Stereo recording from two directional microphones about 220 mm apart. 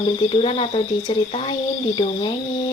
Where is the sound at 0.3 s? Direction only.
25° left (ahead or behind).